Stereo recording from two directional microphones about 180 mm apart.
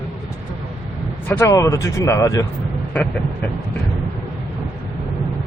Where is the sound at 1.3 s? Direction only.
15° left (ahead or behind).